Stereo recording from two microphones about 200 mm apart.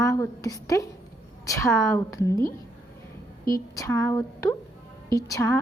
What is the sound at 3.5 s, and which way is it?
A woman's voice, 15° left (ahead or behind).